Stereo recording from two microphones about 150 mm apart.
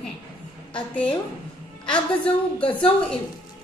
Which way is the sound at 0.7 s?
10° left (ahead or behind).